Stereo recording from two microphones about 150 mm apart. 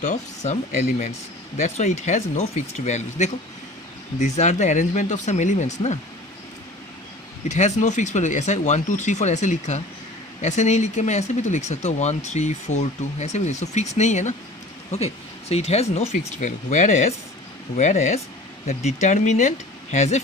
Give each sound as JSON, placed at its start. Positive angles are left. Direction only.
{"t": 0.0, "sound": "speech", "side_deg": 50}
{"t": 7.4, "sound": "speech", "side_deg": 55}
{"t": 16.1, "sound": "speech", "side_deg": 60}